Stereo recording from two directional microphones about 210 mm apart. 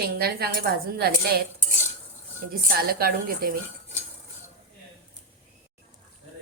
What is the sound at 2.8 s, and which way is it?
Speech, 45° right (ahead or behind).